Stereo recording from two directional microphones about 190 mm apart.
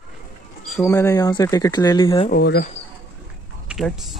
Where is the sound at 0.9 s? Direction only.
15° left (ahead or behind).